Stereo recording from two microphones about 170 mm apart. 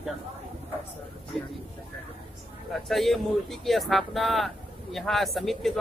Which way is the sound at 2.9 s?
Centre (ahead or behind).